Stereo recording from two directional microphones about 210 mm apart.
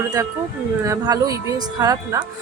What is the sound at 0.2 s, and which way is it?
Speech, 15° right (ahead or behind).